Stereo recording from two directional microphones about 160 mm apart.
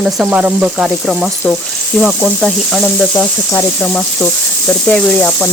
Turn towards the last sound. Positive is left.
turn(degrees=5)  # may be behind; listen again after turning